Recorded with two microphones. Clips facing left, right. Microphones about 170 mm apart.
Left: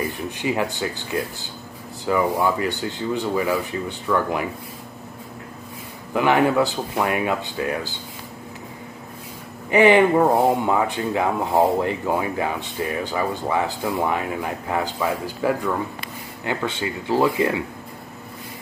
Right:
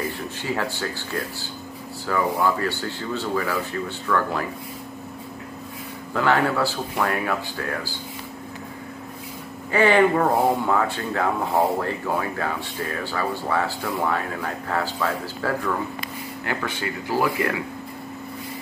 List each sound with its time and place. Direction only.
0.4 s speech: 15° left (ahead or behind)
6.1 s speech: 15° left (ahead or behind)
9.7 s speech: 20° left (ahead or behind)